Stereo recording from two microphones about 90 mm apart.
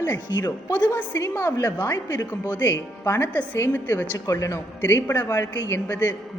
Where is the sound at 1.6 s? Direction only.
45° left (ahead or behind).